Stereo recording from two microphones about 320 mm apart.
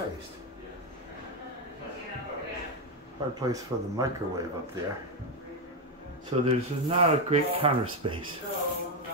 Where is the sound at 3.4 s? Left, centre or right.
Centre.